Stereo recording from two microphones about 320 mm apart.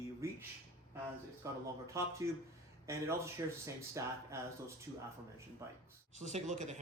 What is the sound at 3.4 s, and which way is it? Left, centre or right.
Speech, centre.